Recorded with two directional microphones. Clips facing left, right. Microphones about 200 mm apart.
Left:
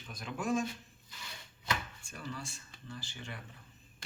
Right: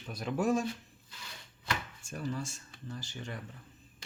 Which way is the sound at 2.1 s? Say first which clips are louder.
Right 7 dB; 40° right (ahead or behind).